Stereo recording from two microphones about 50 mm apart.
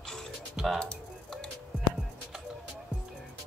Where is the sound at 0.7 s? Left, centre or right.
Centre.